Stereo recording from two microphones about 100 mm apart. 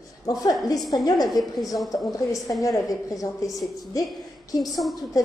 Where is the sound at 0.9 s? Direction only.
40° left (ahead or behind).